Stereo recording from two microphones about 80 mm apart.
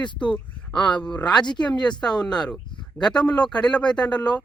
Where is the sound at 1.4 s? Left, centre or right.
Left.